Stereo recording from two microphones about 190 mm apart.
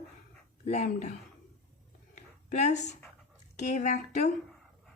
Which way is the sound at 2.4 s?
35° left (ahead or behind).